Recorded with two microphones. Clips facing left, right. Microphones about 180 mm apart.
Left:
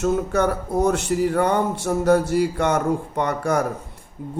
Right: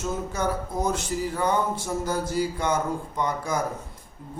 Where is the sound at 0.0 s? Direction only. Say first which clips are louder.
Left 8 dB; 65° left (ahead or behind).